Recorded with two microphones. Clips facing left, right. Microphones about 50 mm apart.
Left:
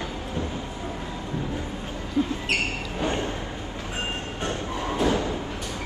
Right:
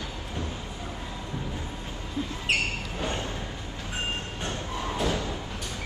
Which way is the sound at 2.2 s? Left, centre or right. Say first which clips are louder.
Left 8 dB; left.